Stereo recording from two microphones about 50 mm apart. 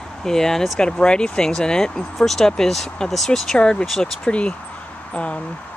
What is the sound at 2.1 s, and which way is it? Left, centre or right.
Speech, centre.